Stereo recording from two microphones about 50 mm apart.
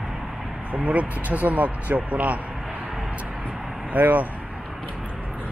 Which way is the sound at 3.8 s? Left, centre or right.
Right.